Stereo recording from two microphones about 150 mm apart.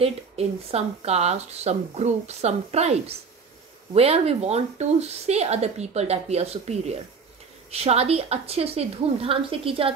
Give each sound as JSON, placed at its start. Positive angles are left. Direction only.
{"t": 0.0, "sound": "a woman's voice", "side_deg": -40}